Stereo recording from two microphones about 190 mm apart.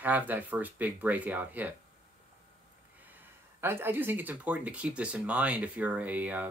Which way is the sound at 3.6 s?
10° right (ahead or behind).